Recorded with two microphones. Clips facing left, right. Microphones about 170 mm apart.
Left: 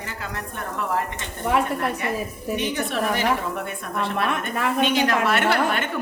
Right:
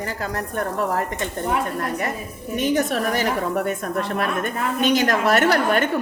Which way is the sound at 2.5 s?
40° right (ahead or behind).